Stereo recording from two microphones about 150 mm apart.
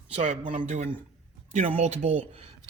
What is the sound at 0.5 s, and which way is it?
Speech, 50° right (ahead or behind).